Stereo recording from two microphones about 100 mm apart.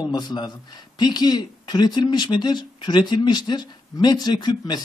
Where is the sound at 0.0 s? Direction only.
45° left (ahead or behind).